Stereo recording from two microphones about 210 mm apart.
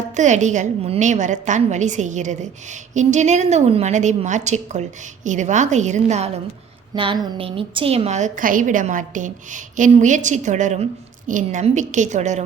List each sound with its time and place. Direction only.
0.2 s a woman's voice: 35° right (ahead or behind)